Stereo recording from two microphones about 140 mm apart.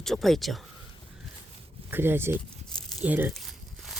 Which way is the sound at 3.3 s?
Centre (ahead or behind).